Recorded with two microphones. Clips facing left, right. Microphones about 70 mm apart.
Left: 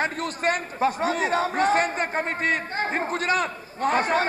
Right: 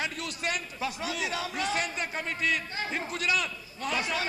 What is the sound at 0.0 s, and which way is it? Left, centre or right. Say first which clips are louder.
A man's voice: left 8 dB; left.